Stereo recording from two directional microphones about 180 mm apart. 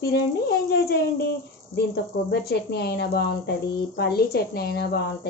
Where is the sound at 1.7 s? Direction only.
65° left (ahead or behind).